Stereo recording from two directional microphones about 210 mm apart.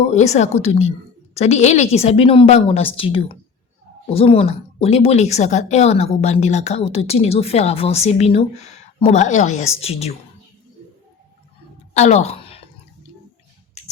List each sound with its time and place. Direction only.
0.1 s a woman's voice: 30° left (ahead or behind)
11.9 s a woman's voice: 30° left (ahead or behind)